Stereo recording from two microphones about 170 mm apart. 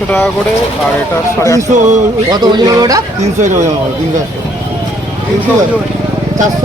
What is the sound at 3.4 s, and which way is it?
Speech, 45° right (ahead or behind).